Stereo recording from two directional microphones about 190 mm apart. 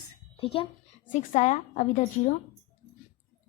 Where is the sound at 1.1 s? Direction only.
40° left (ahead or behind).